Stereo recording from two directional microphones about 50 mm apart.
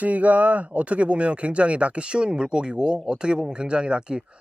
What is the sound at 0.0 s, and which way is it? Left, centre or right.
Speech, right.